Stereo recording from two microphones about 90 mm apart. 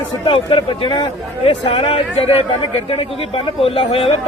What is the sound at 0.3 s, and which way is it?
Speech, 85° left.